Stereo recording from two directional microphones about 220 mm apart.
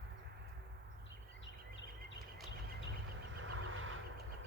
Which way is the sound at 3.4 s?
60° right (ahead or behind).